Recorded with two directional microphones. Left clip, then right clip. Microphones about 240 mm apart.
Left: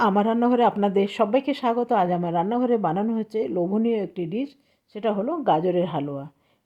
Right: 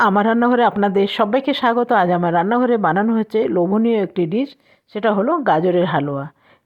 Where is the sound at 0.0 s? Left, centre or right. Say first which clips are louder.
Right 6 dB; centre.